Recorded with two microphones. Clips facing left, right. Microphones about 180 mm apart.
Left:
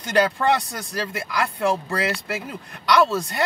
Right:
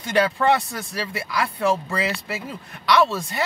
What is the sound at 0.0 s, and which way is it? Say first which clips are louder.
Speech: even; centre (ahead or behind).